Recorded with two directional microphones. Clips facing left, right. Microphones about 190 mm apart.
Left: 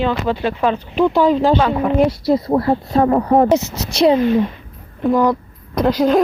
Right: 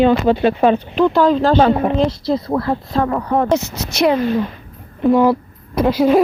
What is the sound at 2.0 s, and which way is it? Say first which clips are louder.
Speech: left 2 dB; 10° left (ahead or behind).